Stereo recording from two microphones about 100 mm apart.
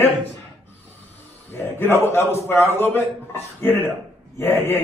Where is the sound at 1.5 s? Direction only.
20° left (ahead or behind).